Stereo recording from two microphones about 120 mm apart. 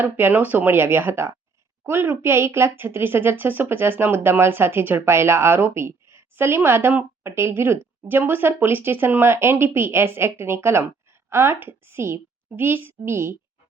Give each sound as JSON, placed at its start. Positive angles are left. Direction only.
{"t": 0.0, "sound": "a woman's voice", "side_deg": -15}